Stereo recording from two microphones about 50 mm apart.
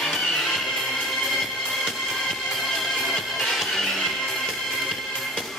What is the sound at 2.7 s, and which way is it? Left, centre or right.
Music, centre.